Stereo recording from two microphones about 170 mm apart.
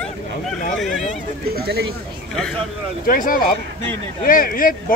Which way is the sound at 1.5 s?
70° right (ahead or behind).